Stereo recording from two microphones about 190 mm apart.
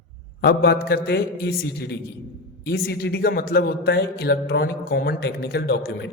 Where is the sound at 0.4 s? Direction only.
55° left (ahead or behind).